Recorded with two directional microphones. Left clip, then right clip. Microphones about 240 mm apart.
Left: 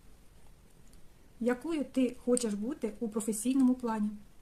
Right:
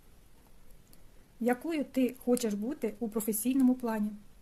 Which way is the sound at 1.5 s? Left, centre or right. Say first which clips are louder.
Right 1 dB; right.